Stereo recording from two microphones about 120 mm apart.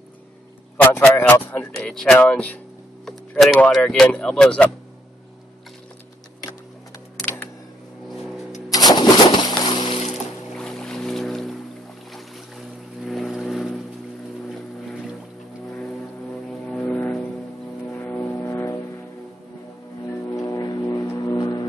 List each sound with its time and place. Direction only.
0.7 s speech: 15° left (ahead or behind)
3.1 s speech: centre (ahead or behind)
7.2 s a sound: 15° left (ahead or behind)
8.1 s vehicle: centre (ahead or behind)
8.6 s a sound: 30° left (ahead or behind); by 10.0 s 45° left (ahead or behind)
10.1 s music: 5° left (ahead or behind)
12.1 s boat: centre (ahead or behind)
16.4 s vehicle: 5° left (ahead or behind); by 18.8 s 20° left (ahead or behind)
20.3 s music: 25° left (ahead or behind)